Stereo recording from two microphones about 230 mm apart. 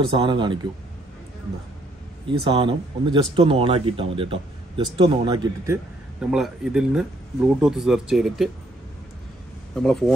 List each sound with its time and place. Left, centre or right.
0.1 s speech: right
2.4 s speech: right
6.3 s speech: centre
9.8 s speech: centre